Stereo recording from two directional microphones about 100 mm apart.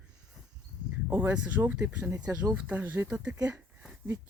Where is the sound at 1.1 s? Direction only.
20° right (ahead or behind).